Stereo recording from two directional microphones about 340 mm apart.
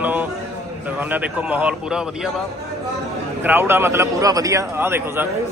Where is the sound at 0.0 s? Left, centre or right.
Centre.